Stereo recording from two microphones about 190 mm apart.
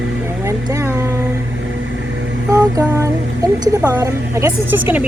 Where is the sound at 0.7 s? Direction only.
15° right (ahead or behind).